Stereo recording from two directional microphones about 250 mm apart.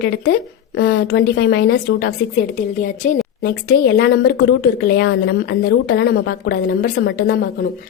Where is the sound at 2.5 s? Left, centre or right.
Left.